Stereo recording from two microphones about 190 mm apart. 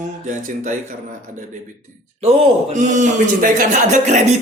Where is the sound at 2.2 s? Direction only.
30° right (ahead or behind).